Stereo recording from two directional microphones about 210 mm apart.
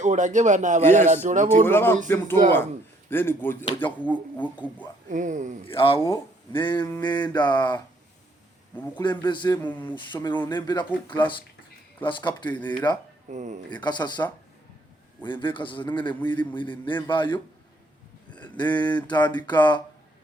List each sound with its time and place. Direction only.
0.0 s speech: 35° right (ahead or behind)
1.6 s speech: 10° left (ahead or behind)
5.0 s speech: 35° right (ahead or behind)
5.6 s a man's voice: 25° left (ahead or behind)
9.0 s a man's voice: 20° left (ahead or behind)
9.6 s speech: 10° left (ahead or behind)
9.9 s a man's voice: 20° left (ahead or behind)
13.3 s speech: 35° right (ahead or behind)
13.7 s a man's voice: 20° left (ahead or behind)
18.4 s a sound: 20° left (ahead or behind)
18.7 s speech: 5° left (ahead or behind)
19.0 s a man's voice: 20° left (ahead or behind)